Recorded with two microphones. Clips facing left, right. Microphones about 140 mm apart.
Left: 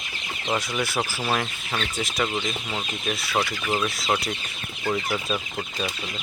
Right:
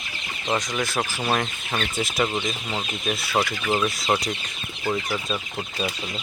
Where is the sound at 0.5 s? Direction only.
10° left (ahead or behind).